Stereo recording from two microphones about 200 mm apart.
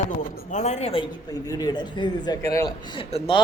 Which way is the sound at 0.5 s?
35° left (ahead or behind).